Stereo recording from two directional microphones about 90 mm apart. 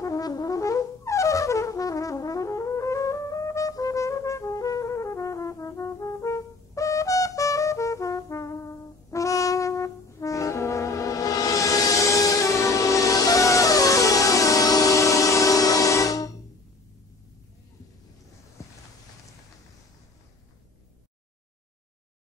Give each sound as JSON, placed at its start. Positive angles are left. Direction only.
{"t": 0.0, "sound": "brass instrument", "side_deg": 40}